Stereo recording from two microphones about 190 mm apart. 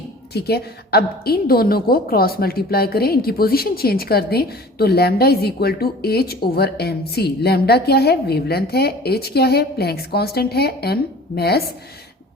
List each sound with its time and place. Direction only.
0.3 s a woman's voice: 55° left (ahead or behind)